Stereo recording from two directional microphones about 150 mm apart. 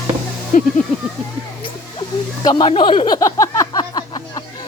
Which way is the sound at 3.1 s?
20° left (ahead or behind).